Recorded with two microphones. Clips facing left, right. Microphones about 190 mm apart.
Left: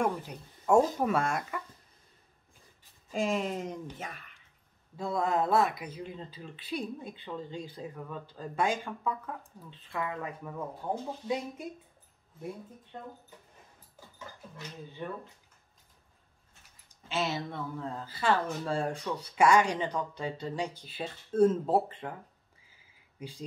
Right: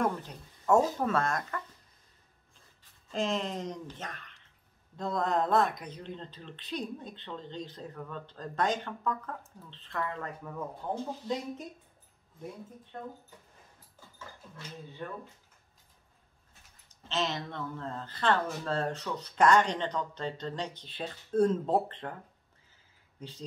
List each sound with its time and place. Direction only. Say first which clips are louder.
0.0 s speech: even; 10° left (ahead or behind)
3.1 s speech: left 1 dB; 10° left (ahead or behind)
15.0 s speech: left 2 dB; 15° left (ahead or behind)
17.1 s speech: left 1 dB; 10° left (ahead or behind)
22.7 s a sound: left 1 dB; 10° left (ahead or behind)